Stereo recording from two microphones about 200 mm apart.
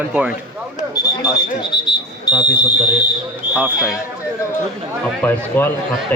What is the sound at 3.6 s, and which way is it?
Speech, 5° right (ahead or behind).